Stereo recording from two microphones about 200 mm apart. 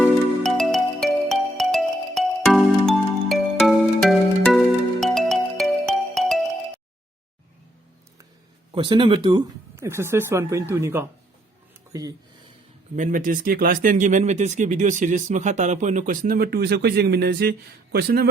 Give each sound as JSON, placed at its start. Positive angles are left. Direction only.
{"t": 0.4, "sound": "music", "side_deg": 0}
{"t": 8.7, "sound": "speech", "side_deg": -25}
{"t": 13.0, "sound": "a man's voice", "side_deg": -40}